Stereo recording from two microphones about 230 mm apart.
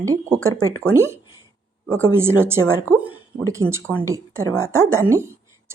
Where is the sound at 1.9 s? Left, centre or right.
Right.